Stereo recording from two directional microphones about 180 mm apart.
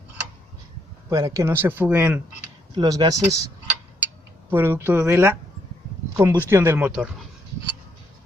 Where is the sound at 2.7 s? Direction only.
20° right (ahead or behind).